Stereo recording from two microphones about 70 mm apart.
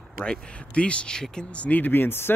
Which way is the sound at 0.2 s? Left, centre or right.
Centre.